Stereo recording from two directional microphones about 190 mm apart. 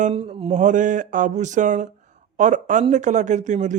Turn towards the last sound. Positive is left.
turn(degrees=-40)  # may be behind; listen again after turning